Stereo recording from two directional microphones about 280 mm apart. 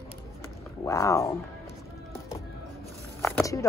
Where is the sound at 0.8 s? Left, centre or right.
Centre.